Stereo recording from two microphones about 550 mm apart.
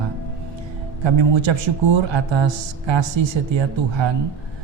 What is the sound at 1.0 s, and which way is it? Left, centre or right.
Speech, right.